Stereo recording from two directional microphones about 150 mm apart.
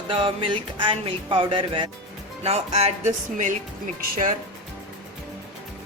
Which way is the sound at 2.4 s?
45° right (ahead or behind).